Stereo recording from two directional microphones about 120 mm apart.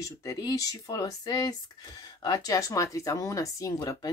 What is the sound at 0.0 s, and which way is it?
Speech, 30° left (ahead or behind).